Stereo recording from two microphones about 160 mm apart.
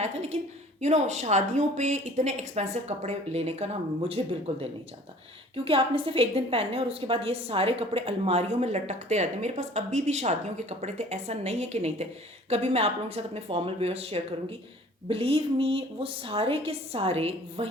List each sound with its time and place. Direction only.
0.0 s a woman's voice: 40° right (ahead or behind)
5.6 s a woman's voice: 35° right (ahead or behind)